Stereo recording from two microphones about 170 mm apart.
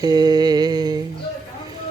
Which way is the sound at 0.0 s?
25° right (ahead or behind).